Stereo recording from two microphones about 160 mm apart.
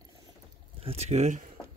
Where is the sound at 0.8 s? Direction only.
45° right (ahead or behind).